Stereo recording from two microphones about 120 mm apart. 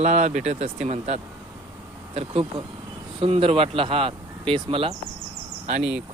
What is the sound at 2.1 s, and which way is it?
Speech, 50° right (ahead or behind).